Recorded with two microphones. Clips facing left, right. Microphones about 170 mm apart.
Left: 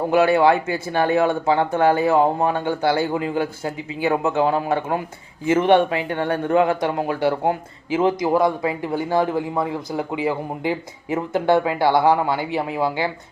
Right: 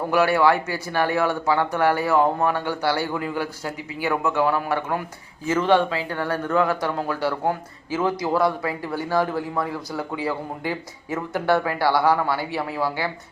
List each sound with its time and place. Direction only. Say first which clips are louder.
0.1 s speech: left 3 dB; 20° left (ahead or behind)